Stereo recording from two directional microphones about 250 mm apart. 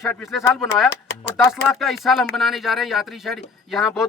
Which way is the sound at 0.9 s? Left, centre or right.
Left.